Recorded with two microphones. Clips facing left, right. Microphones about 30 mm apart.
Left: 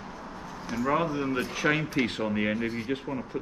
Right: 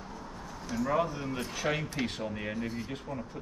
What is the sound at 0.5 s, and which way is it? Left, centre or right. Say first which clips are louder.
Speech: left 4 dB; left.